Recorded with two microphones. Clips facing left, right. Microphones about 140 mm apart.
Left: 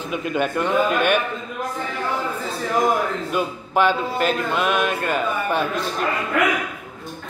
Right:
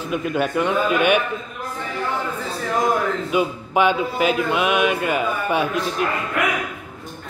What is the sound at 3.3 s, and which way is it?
Music, 10° right (ahead or behind).